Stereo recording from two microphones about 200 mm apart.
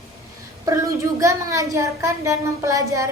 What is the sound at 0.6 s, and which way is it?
A child's voice, 15° right (ahead or behind).